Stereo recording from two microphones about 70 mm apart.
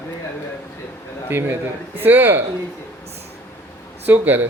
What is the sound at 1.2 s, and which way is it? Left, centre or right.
Speech, right.